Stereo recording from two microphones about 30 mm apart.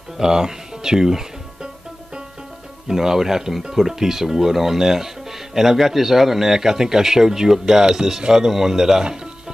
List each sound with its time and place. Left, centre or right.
0.2 s speech: centre
2.9 s speech: centre
9.0 s speech: right